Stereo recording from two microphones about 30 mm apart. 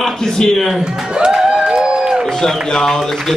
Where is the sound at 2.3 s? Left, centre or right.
Centre.